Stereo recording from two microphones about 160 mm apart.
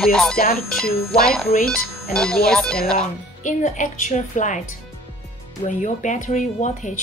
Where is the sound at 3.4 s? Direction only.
50° left (ahead or behind).